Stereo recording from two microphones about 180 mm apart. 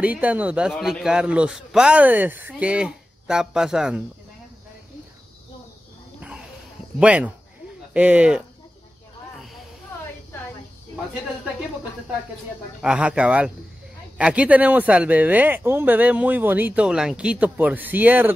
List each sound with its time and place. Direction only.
0.0 s a man's voice: 10° right (ahead or behind)
7.0 s speech: 5° right (ahead or behind)
12.8 s a man's voice: 5° right (ahead or behind)